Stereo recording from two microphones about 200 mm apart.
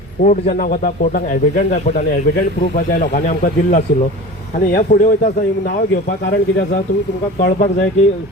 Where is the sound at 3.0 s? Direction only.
40° left (ahead or behind).